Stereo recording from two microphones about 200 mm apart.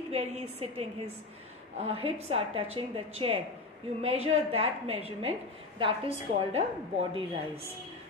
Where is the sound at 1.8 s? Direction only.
30° right (ahead or behind).